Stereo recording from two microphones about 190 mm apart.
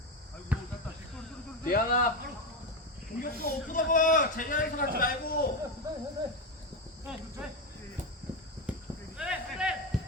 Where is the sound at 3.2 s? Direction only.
45° left (ahead or behind).